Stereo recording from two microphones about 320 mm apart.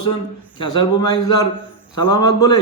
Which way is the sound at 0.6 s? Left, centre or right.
Centre.